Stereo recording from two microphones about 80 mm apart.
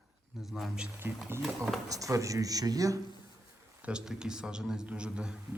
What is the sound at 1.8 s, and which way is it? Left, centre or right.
Speech, right.